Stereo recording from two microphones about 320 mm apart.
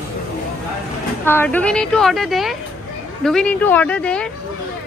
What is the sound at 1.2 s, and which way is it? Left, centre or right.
Speech, centre.